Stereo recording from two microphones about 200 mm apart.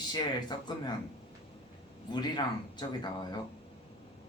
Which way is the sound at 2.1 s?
20° left (ahead or behind).